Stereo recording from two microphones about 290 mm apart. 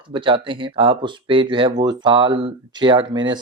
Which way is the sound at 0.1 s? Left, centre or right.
Centre.